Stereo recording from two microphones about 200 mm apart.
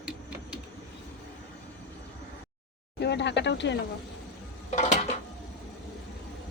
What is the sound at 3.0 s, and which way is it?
Speech, 60° left (ahead or behind).